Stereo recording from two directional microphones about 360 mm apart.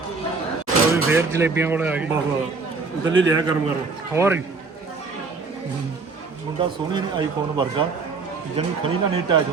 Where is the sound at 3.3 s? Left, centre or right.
Centre.